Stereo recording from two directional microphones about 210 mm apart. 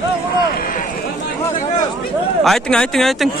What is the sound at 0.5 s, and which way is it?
Run, 40° left (ahead or behind).